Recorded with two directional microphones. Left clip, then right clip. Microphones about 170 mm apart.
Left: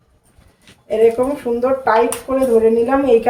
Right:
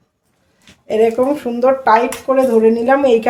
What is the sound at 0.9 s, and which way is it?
A woman's voice, 65° right (ahead or behind).